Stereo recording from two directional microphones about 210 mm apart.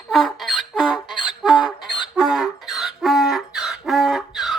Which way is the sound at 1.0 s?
20° left (ahead or behind).